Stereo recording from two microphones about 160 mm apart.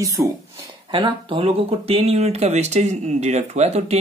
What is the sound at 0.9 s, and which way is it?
Speech, 35° right (ahead or behind).